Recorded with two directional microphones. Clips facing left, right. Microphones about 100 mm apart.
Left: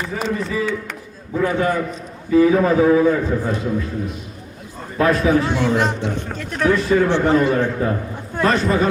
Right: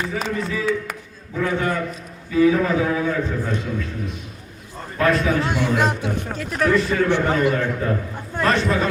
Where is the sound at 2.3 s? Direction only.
35° left (ahead or behind).